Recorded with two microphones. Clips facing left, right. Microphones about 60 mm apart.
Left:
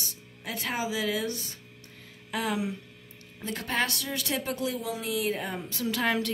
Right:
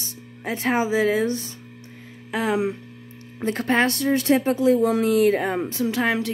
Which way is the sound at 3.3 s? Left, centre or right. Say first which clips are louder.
Right 9 dB; right.